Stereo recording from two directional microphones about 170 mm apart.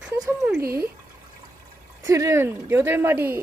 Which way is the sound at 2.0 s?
20° right (ahead or behind).